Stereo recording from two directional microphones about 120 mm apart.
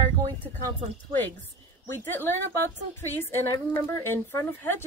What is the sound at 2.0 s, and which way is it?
A woman's voice, 20° left (ahead or behind).